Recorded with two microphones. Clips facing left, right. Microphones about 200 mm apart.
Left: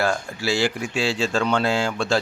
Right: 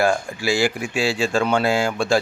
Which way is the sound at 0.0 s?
15° right (ahead or behind).